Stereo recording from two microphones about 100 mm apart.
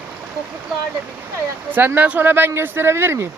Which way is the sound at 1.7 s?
20° right (ahead or behind).